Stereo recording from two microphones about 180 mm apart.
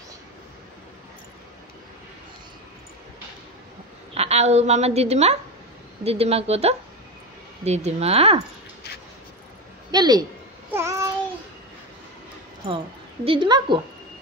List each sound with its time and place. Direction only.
4.1 s a woman's voice: 35° right (ahead or behind)
9.8 s a man's voice: 20° right (ahead or behind)
10.7 s babbling: 15° right (ahead or behind)
12.6 s a woman's voice: 30° right (ahead or behind)